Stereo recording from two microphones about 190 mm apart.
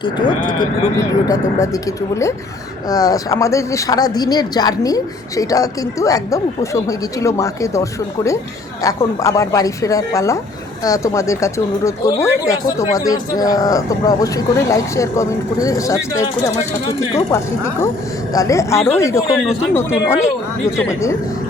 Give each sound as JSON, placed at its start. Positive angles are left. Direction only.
{"t": 0.0, "sound": "speech", "side_deg": 25}
{"t": 8.8, "sound": "speech", "side_deg": 20}